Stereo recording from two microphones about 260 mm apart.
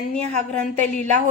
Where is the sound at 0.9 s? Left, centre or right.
Right.